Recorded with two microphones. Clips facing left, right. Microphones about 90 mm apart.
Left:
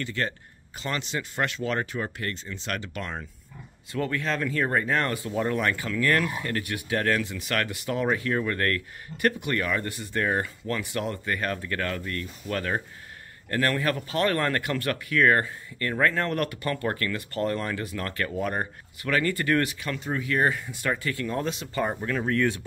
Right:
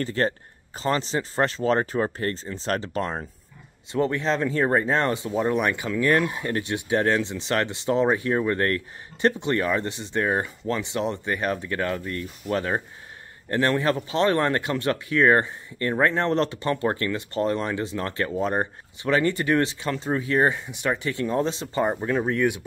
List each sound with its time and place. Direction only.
0.0 s speech: 35° right (ahead or behind); by 22.6 s 15° right (ahead or behind)